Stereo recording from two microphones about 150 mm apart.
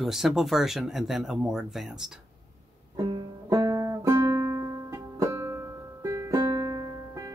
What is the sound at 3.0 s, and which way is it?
Music, 25° right (ahead or behind).